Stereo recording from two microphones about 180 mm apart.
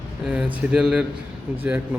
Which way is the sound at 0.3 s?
5° right (ahead or behind).